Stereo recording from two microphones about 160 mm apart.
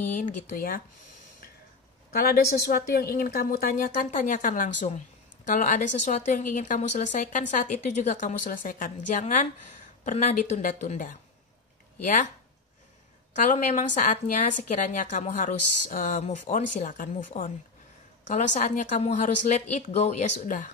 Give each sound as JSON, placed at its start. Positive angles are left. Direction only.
{"t": 0.2, "sound": "a woman's voice", "side_deg": 60}
{"t": 2.1, "sound": "a woman's voice", "side_deg": 70}
{"t": 10.6, "sound": "a woman's voice", "side_deg": 55}
{"t": 13.3, "sound": "a woman's voice", "side_deg": 50}